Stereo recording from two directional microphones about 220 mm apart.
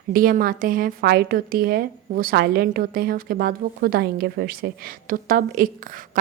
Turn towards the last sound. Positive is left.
turn(degrees=-40)  # may be behind; listen again after turning